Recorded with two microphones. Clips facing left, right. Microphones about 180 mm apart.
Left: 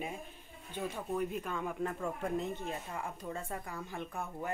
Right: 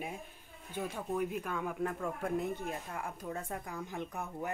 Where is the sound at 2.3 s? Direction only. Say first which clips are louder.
Right 1 dB; 10° right (ahead or behind).